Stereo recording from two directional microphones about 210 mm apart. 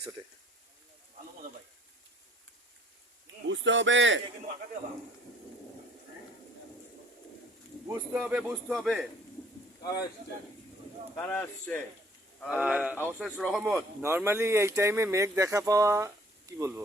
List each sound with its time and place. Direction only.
3.4 s speech: 60° right (ahead or behind)
7.9 s speech: 10° right (ahead or behind)
11.2 s speech: 5° left (ahead or behind)
12.5 s speech: 5° right (ahead or behind)
14.0 s speech: 10° right (ahead or behind)